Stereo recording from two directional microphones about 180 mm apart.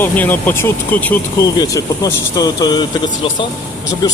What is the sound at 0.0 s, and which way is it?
Speech, 10° left (ahead or behind).